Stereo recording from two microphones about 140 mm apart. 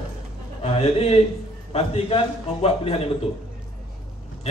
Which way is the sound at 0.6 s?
45° left (ahead or behind).